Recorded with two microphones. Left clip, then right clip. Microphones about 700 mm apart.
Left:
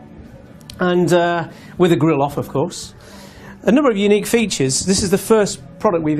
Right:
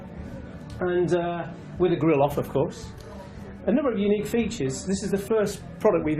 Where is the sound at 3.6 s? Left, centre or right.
Left.